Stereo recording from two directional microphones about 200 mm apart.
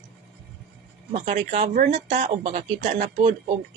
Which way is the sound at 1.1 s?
35° right (ahead or behind).